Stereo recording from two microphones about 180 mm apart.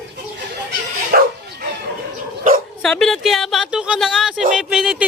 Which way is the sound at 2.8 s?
Centre (ahead or behind).